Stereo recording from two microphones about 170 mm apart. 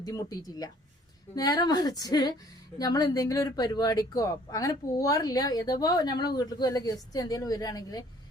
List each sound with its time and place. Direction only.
0.0 s speech: 20° left (ahead or behind)